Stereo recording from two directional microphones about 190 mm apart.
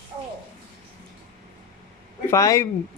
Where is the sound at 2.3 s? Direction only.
15° left (ahead or behind).